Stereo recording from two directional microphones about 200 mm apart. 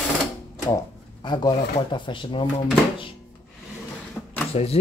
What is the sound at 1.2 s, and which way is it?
Speech, 20° left (ahead or behind).